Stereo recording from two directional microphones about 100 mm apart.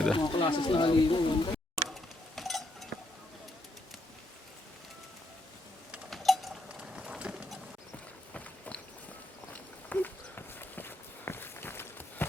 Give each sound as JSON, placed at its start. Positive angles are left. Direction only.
{"t": 0.1, "sound": "speech", "side_deg": 60}
{"t": 2.3, "sound": "a sound", "side_deg": 0}
{"t": 6.1, "sound": "tick-tock", "side_deg": 0}
{"t": 6.7, "sound": "run", "side_deg": -10}
{"t": 8.3, "sound": "walk", "side_deg": 10}